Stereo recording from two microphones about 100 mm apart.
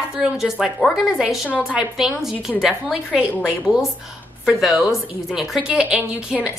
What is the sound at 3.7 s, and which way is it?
Speech, 15° right (ahead or behind).